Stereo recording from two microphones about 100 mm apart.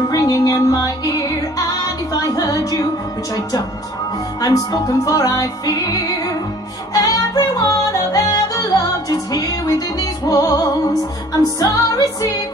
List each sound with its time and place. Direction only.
0.1 s music: 35° left (ahead or behind)
2.2 s music: 35° left (ahead or behind)
4.4 s music: 35° left (ahead or behind)
6.9 s yodeling: 35° left (ahead or behind)
11.6 s music: 35° left (ahead or behind)